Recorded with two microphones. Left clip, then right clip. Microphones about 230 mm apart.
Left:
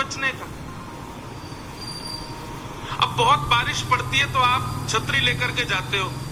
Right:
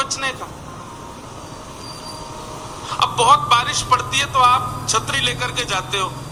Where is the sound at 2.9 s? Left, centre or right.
Right.